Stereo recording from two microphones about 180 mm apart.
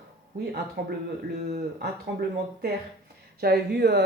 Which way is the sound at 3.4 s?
65° right (ahead or behind).